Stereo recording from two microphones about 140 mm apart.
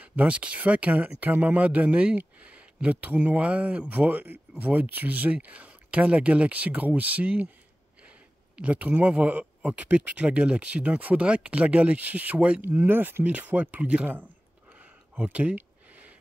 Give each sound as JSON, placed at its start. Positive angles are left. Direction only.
{"t": 0.0, "sound": "speech", "side_deg": -10}